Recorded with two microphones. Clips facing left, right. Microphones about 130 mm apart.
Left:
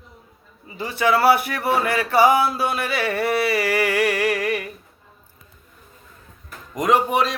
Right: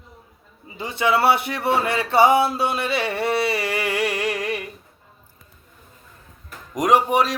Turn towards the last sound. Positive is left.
turn(degrees=-10)  # may be behind; listen again after turning